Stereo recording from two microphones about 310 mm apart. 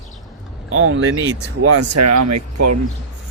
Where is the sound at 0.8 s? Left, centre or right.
Right.